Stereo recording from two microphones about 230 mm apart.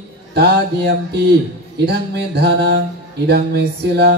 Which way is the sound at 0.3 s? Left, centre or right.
Right.